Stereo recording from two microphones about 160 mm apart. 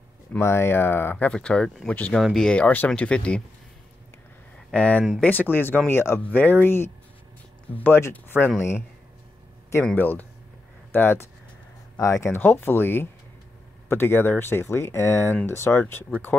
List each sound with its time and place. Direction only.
0.3 s speech: 15° left (ahead or behind)
4.6 s speech: 5° left (ahead or behind)
9.8 s speech: 10° left (ahead or behind)